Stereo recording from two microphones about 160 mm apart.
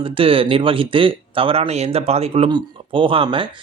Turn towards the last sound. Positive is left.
turn(degrees=-35)  # may be behind; listen again after turning